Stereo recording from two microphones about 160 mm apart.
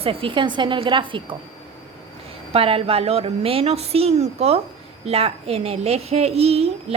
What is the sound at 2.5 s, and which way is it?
A child's voice, 35° right (ahead or behind).